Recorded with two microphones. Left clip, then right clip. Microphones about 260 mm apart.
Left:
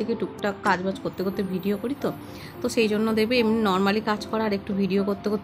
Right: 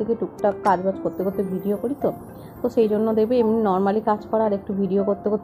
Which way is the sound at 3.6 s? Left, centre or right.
Left.